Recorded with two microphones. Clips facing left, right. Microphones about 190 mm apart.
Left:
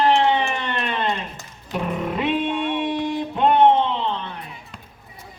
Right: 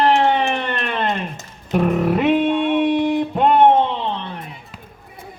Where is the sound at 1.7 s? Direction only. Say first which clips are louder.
Right 7 dB; 50° right (ahead or behind).